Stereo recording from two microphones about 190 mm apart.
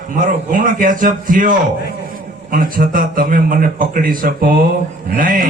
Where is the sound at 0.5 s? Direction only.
45° right (ahead or behind).